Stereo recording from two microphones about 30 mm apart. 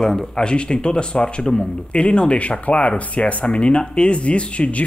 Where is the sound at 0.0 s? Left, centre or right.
Left.